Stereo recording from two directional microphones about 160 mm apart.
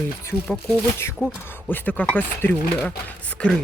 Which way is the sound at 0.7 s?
15° left (ahead or behind).